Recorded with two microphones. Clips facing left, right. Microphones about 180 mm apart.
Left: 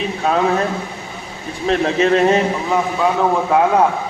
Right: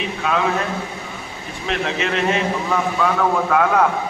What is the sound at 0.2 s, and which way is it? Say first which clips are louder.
Speech: left 4 dB; 35° left (ahead or behind).